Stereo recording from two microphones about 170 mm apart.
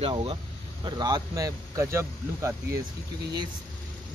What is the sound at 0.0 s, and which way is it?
Speech, 30° right (ahead or behind).